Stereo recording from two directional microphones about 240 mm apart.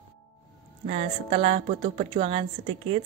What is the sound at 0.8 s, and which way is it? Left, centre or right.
A woman's voice, right.